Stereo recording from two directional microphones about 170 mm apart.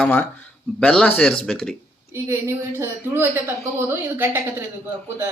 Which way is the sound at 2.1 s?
15° right (ahead or behind).